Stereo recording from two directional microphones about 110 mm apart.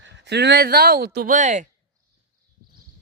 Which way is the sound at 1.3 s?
90° right.